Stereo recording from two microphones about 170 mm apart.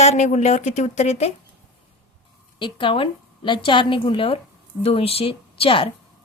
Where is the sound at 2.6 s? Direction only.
30° left (ahead or behind).